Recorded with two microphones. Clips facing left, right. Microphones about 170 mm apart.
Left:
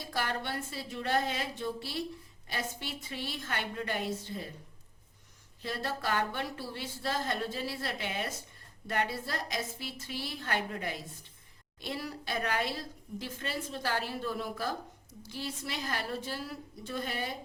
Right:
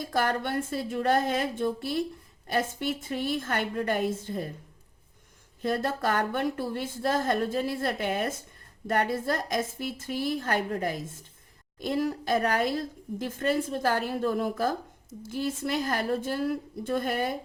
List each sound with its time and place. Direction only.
0.0 s a woman's voice: 50° right (ahead or behind)
5.6 s a woman's voice: 50° right (ahead or behind)